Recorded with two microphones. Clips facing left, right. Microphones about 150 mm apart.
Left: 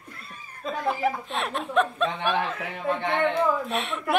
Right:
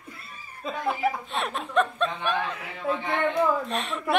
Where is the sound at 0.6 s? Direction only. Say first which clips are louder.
Left 1 dB; centre (ahead or behind).